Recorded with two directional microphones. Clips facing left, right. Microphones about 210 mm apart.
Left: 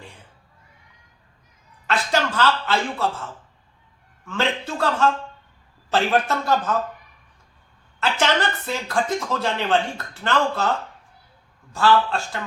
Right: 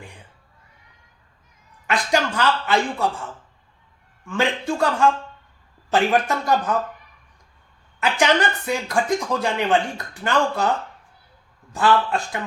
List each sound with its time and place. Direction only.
1.9 s speech: 15° right (ahead or behind)
4.3 s speech: 15° right (ahead or behind)
7.9 s speech: 15° right (ahead or behind)
11.7 s speech: 20° right (ahead or behind)